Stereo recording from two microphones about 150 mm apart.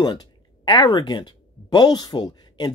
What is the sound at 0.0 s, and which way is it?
Speech, 30° left (ahead or behind).